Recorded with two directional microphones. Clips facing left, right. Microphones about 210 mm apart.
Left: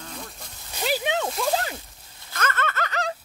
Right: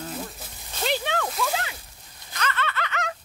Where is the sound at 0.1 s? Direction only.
5° right (ahead or behind).